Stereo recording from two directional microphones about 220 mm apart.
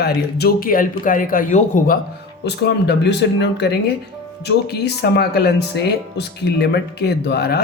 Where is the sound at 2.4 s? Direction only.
50° left (ahead or behind).